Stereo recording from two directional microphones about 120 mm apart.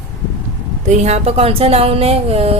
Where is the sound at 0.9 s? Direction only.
70° right (ahead or behind).